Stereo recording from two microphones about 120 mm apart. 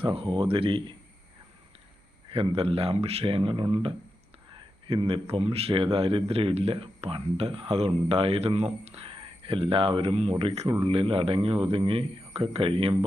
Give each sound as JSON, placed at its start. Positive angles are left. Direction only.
{"t": 0.0, "sound": "speech", "side_deg": -50}
{"t": 2.3, "sound": "speech", "side_deg": -50}